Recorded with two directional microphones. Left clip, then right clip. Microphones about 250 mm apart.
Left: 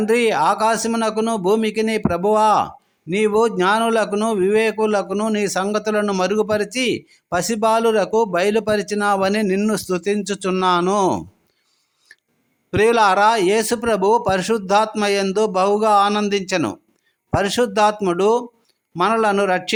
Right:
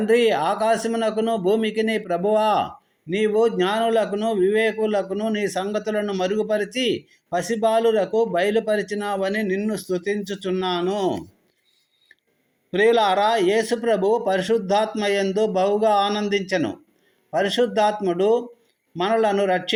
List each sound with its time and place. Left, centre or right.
0.0 s a man's voice: left
12.7 s a man's voice: left